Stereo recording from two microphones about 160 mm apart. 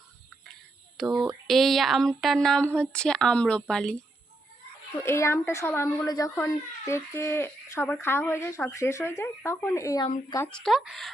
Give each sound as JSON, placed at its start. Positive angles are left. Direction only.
{"t": 1.0, "sound": "speech", "side_deg": 0}
{"t": 5.0, "sound": "speech", "side_deg": 15}
{"t": 10.4, "sound": "speech", "side_deg": 5}